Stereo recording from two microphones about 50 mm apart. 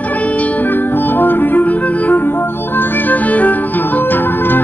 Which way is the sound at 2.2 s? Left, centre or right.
Left.